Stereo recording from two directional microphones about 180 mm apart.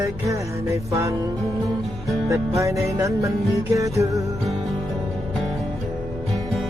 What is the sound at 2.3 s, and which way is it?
Music, 15° right (ahead or behind).